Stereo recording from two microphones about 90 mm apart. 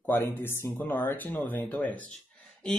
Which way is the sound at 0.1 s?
25° left (ahead or behind).